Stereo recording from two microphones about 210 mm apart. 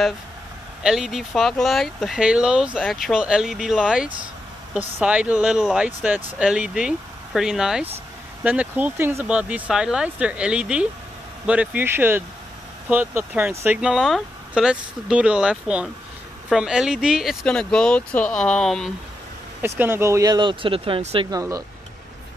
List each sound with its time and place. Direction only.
0.8 s speech: centre (ahead or behind)
19.6 s speech: 10° right (ahead or behind)